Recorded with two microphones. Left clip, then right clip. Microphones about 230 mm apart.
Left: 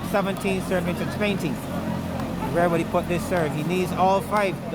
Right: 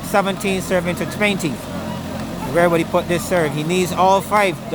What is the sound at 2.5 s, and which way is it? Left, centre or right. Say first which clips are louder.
Speech: right 7 dB; right.